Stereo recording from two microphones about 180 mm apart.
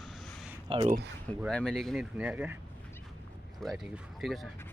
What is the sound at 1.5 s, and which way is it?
Speech, 5° left (ahead or behind).